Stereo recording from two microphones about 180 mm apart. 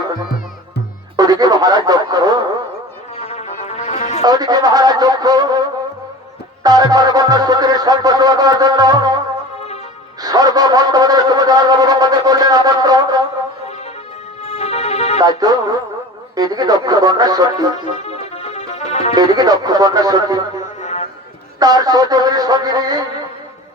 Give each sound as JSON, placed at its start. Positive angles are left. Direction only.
{"t": 1.1, "sound": "speech", "side_deg": -20}
{"t": 3.2, "sound": "music", "side_deg": 35}
{"t": 4.2, "sound": "wind instrument", "side_deg": -20}
{"t": 6.6, "sound": "music", "side_deg": -20}
{"t": 10.2, "sound": "wind instrument", "side_deg": -20}
{"t": 14.4, "sound": "music", "side_deg": 35}
{"t": 15.2, "sound": "wind instrument", "side_deg": -20}
{"t": 18.0, "sound": "music", "side_deg": 35}
{"t": 19.1, "sound": "wind instrument", "side_deg": -20}
{"t": 20.6, "sound": "music", "side_deg": 40}
{"t": 21.6, "sound": "wind instrument", "side_deg": -20}